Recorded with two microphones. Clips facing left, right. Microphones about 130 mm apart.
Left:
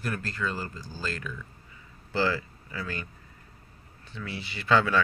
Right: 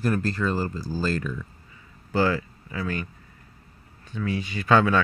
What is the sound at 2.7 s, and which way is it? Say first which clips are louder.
Speech: right 6 dB; 20° right (ahead or behind).